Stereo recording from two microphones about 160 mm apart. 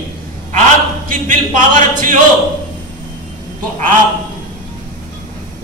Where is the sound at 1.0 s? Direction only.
55° right (ahead or behind).